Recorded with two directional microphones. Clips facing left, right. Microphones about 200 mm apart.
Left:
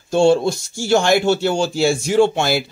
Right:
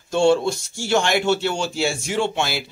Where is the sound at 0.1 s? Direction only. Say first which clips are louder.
Left 3 dB; 35° left (ahead or behind).